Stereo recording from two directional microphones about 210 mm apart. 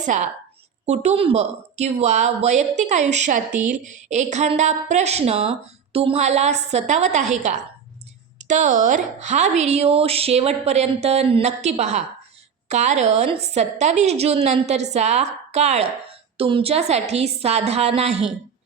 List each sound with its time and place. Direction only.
0.0 s a woman's voice: 35° right (ahead or behind)